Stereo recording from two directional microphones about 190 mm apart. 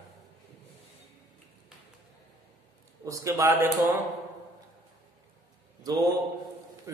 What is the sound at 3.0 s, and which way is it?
A man's voice, 15° right (ahead or behind).